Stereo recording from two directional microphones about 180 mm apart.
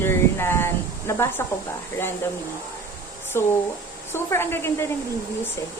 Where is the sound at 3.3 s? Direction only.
15° left (ahead or behind).